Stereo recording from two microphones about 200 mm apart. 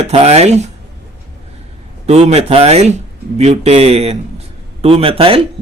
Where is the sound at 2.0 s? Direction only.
30° right (ahead or behind).